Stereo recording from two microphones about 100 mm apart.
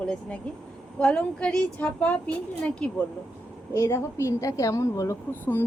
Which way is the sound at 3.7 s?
25° left (ahead or behind).